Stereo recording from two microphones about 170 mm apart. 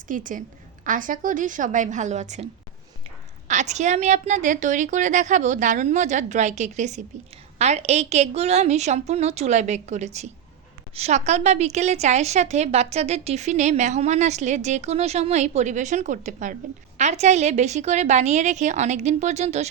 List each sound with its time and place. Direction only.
0.1 s a woman's voice: 50° right (ahead or behind)
3.5 s a woman's voice: 45° right (ahead or behind)